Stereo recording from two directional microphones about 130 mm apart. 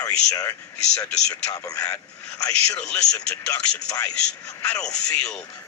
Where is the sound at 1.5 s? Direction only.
30° left (ahead or behind).